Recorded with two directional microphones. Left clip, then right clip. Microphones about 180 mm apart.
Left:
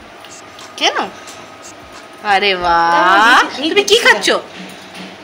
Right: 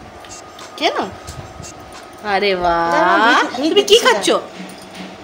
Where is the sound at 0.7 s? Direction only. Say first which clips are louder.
Left 3 dB; 15° right (ahead or behind).